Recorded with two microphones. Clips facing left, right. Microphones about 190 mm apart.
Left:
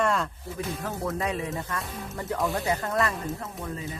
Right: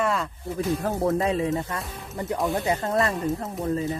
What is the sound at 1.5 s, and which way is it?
Speech, 20° right (ahead or behind).